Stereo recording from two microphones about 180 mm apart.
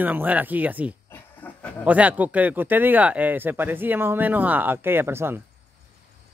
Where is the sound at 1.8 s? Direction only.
10° right (ahead or behind).